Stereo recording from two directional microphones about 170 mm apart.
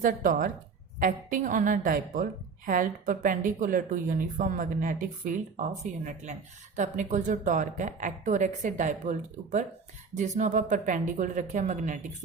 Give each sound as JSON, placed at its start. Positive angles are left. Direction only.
{"t": 0.0, "sound": "speech", "side_deg": -50}